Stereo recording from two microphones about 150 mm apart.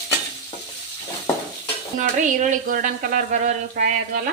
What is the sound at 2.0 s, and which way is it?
A woman's voice, 55° right (ahead or behind).